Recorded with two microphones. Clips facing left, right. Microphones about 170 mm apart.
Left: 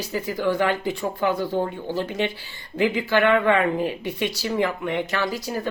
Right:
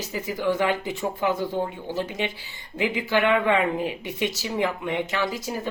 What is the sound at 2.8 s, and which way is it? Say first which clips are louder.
Speech: left 3 dB; 15° right (ahead or behind).